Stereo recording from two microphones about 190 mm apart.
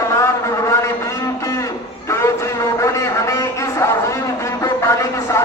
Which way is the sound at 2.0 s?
15° left (ahead or behind).